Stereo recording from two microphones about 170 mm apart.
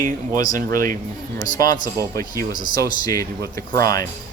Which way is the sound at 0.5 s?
55° right (ahead or behind).